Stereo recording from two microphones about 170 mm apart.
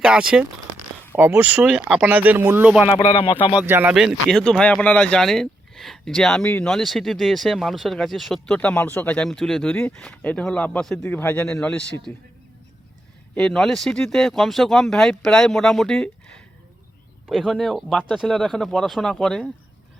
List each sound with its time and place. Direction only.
0.0 s speech: 5° right (ahead or behind)
2.9 s speech: 30° left (ahead or behind)
3.6 s speech: 10° right (ahead or behind)
13.3 s speech: 5° left (ahead or behind)